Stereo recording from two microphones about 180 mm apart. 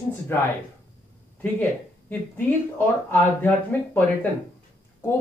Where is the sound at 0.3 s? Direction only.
15° left (ahead or behind).